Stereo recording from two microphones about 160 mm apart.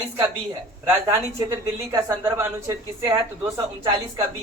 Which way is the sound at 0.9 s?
15° right (ahead or behind).